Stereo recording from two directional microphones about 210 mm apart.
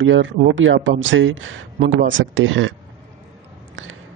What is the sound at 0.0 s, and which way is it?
Speech, 65° right (ahead or behind).